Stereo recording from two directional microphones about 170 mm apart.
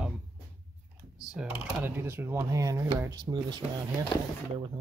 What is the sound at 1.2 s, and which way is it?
Speech, 5° right (ahead or behind).